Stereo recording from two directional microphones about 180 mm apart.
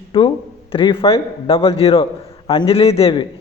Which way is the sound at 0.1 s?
30° left (ahead or behind).